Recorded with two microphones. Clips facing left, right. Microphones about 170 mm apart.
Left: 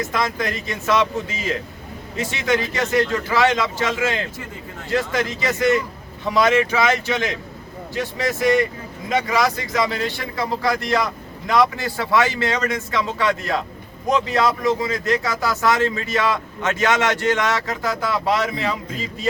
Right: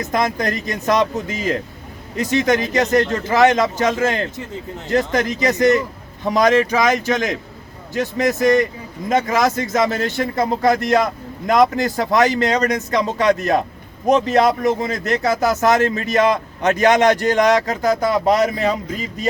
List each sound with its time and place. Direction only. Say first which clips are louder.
0.0 s a man's voice: right 3 dB; 40° right (ahead or behind)